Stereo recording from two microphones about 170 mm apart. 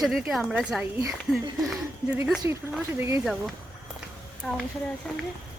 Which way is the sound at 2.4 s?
15° right (ahead or behind).